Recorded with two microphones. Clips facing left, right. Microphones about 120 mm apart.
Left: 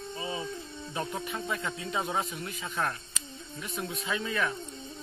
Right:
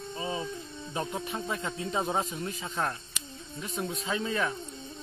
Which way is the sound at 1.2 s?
25° right (ahead or behind).